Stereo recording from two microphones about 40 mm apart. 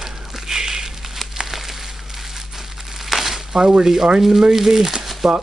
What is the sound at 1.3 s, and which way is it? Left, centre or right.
Crumpling, centre.